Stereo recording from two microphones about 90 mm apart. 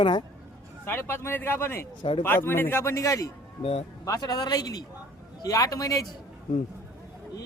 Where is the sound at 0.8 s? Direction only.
25° left (ahead or behind).